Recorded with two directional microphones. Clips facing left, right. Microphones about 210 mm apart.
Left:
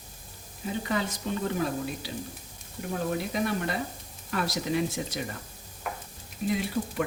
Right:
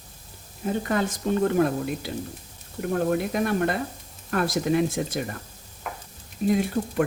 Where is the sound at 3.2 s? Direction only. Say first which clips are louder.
Right 5 dB; 55° right (ahead or behind).